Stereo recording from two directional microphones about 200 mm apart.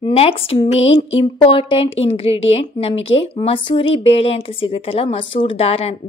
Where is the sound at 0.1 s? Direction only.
30° left (ahead or behind).